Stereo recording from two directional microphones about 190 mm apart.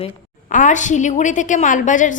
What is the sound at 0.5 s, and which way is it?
A woman's voice, 40° left (ahead or behind).